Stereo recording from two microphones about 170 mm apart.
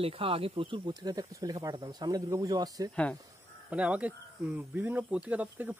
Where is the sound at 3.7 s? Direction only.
5° right (ahead or behind).